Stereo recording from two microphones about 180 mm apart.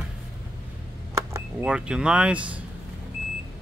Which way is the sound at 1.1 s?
15° right (ahead or behind).